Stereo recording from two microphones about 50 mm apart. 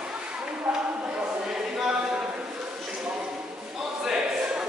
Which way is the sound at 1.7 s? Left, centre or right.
Centre.